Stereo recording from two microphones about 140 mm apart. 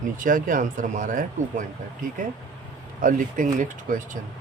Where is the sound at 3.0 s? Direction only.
70° right (ahead or behind).